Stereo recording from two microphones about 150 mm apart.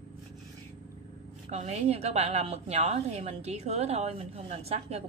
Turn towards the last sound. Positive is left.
turn(degrees=-45)  # may be behind; listen again after turning